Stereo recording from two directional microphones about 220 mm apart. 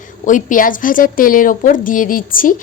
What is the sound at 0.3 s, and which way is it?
A woman's voice, 35° left (ahead or behind).